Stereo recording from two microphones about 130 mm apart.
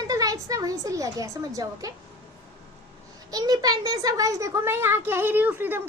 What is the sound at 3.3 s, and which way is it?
Speech, 30° right (ahead or behind).